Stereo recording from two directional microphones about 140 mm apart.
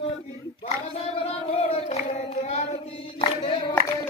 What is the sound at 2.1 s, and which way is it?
Hands, 55° left (ahead or behind).